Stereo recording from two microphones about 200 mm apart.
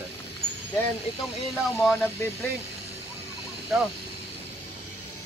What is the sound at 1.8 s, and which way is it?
Speech, 10° left (ahead or behind).